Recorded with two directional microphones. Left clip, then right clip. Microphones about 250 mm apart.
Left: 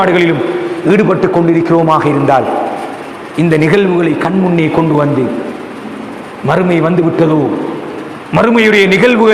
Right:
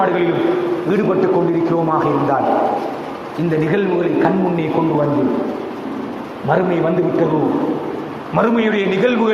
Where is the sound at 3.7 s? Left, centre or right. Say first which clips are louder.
Left 6 dB; left.